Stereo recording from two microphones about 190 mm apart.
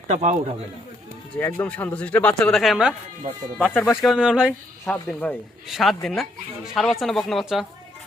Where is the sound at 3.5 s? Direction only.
10° left (ahead or behind).